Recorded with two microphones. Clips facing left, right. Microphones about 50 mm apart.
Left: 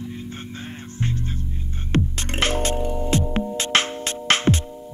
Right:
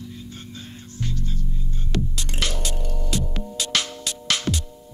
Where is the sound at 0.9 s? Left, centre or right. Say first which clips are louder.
Left 3 dB; left.